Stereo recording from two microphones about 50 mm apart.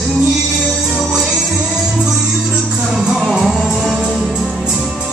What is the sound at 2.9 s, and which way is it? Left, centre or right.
Music, centre.